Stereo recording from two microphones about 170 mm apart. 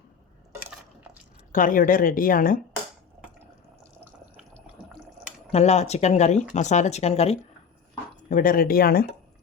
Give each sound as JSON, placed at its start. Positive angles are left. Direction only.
{"t": 1.5, "sound": "speech", "side_deg": 50}
{"t": 5.5, "sound": "speech", "side_deg": 40}
{"t": 8.3, "sound": "speech", "side_deg": 55}